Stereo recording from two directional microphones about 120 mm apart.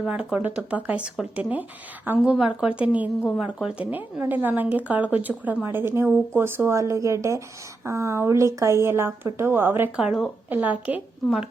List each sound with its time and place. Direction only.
0.0 s speech: 5° right (ahead or behind)
10.0 s speech: 5° right (ahead or behind)